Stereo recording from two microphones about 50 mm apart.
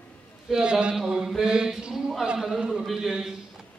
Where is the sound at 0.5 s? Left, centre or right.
Centre.